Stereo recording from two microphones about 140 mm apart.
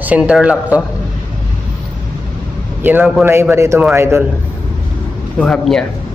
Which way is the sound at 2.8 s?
15° right (ahead or behind).